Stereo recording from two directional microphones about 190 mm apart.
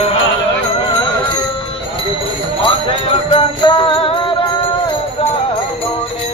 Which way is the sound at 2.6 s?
30° left (ahead or behind).